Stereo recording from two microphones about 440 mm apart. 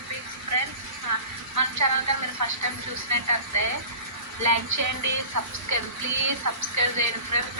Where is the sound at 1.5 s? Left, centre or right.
Right.